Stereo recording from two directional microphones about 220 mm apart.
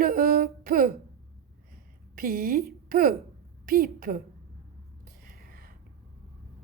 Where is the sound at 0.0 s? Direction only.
40° right (ahead or behind).